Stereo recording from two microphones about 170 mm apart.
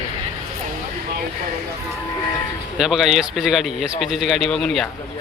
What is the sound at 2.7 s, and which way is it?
Speech, centre (ahead or behind).